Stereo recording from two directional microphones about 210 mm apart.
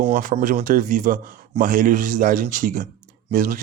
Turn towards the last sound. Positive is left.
turn(degrees=-40)  # may be behind; listen again after turning